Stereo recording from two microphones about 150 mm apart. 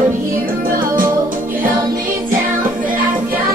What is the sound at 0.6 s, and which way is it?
Music, 70° right (ahead or behind).